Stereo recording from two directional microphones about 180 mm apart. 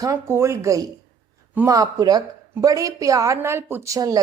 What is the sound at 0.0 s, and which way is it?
A woman's voice, 15° right (ahead or behind).